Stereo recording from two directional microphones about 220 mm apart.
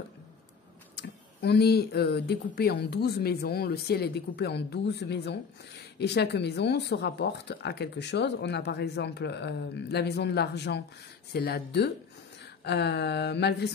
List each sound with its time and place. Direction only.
0.9 s speech: 50° left (ahead or behind)